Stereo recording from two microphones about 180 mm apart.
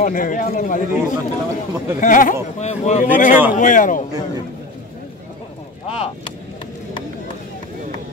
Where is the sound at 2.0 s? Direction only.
45° left (ahead or behind).